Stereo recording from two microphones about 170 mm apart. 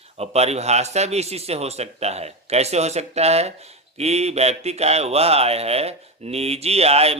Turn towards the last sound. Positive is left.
turn(degrees=-35)  # may be behind; listen again after turning